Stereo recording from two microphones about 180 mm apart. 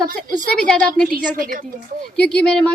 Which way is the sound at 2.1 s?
5° left (ahead or behind).